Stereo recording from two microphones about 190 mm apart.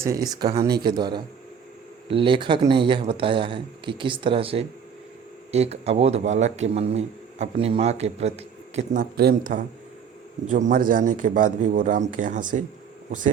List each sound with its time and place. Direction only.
0.0 s a man's voice: 20° right (ahead or behind); by 13.3 s 40° right (ahead or behind)